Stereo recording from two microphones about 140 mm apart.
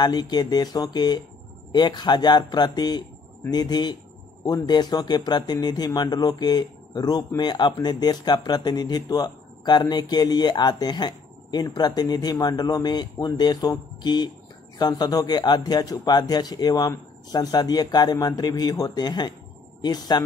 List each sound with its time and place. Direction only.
0.0 s speech: 30° left (ahead or behind)